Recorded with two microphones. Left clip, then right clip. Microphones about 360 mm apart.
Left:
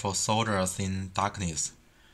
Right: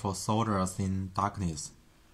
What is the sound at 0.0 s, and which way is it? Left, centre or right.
Speech, centre.